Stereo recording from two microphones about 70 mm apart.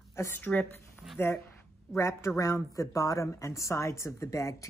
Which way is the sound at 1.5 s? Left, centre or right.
Left.